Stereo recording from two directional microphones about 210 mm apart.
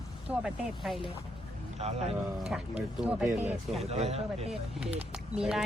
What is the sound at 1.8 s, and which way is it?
Speech, 30° right (ahead or behind).